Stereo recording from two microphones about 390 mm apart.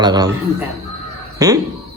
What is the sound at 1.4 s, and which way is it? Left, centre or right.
Speech, centre.